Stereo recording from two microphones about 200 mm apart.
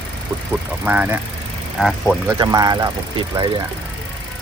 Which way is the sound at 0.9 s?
10° right (ahead or behind).